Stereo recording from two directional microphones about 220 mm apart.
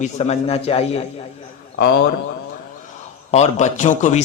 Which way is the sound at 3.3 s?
30° left (ahead or behind).